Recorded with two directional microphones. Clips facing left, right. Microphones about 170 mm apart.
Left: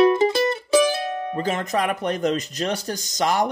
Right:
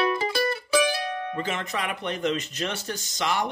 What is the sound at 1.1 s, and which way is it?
Speech, 40° left (ahead or behind).